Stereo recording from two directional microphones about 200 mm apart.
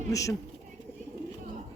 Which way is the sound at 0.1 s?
15° left (ahead or behind).